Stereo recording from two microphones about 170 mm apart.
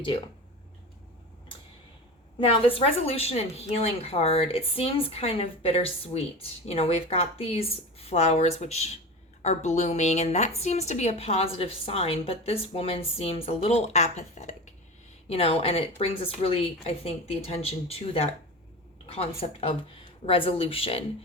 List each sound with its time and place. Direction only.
2.4 s a woman's voice: 35° left (ahead or behind)